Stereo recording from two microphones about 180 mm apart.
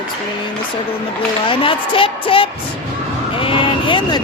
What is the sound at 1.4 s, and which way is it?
Speech, 30° left (ahead or behind).